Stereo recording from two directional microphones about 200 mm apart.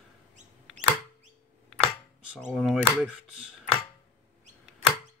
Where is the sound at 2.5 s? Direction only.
Centre (ahead or behind).